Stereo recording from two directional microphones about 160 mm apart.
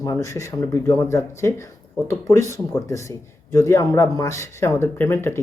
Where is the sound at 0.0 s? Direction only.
20° left (ahead or behind).